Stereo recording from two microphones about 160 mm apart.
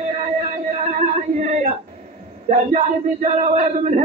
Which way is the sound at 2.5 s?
45° right (ahead or behind).